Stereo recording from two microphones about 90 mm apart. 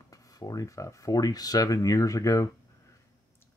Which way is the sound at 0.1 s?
40° left (ahead or behind).